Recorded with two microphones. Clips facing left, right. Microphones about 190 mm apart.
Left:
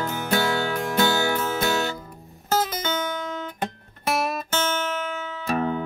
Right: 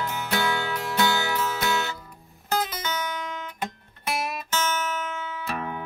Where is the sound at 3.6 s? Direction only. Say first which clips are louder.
Left 4 dB; 50° left (ahead or behind).